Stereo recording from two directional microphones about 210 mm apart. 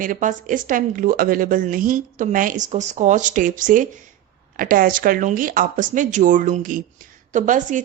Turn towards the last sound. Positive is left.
turn(degrees=-35)  # may be behind; listen again after turning